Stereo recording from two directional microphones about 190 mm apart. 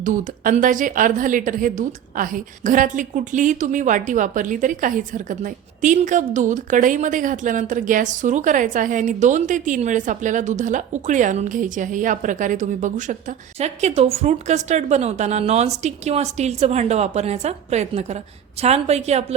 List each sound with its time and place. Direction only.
0.0 s a woman's voice: 45° right (ahead or behind)